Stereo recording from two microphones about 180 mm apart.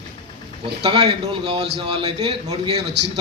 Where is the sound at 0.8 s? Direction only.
25° right (ahead or behind).